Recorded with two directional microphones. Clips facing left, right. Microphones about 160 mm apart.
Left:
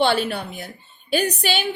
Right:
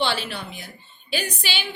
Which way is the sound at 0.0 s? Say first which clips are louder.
Left 6 dB; 50° left (ahead or behind).